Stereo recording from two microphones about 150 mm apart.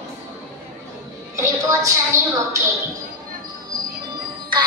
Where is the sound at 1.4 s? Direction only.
20° right (ahead or behind).